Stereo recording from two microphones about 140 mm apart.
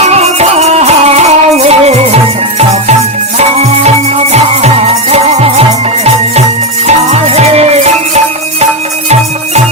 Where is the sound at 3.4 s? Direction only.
50° right (ahead or behind).